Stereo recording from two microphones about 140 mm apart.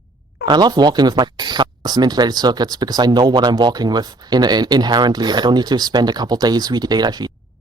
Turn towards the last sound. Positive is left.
turn(degrees=-30)  # may be behind; listen again after turning